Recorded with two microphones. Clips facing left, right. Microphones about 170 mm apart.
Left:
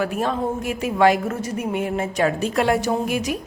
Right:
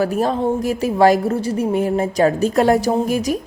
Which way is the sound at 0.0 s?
35° right (ahead or behind).